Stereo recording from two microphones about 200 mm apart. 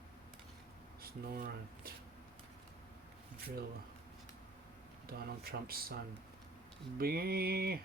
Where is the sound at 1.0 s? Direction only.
50° right (ahead or behind).